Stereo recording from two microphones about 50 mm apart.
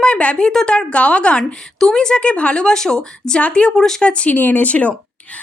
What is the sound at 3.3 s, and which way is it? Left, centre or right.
Speech, left.